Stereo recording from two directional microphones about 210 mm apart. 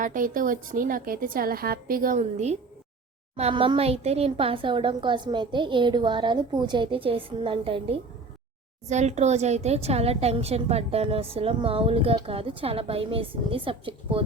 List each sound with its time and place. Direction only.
0.0 s a woman's voice: 40° right (ahead or behind)